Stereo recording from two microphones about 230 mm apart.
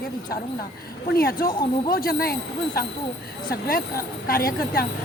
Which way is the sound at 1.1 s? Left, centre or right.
Left.